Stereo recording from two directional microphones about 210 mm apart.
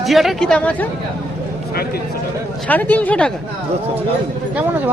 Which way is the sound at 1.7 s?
45° left (ahead or behind).